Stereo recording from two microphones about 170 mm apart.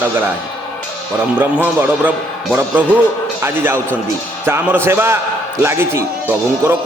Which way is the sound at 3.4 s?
15° right (ahead or behind).